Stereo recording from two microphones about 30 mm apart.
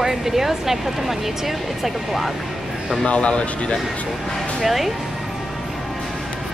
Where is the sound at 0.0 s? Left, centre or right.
Centre.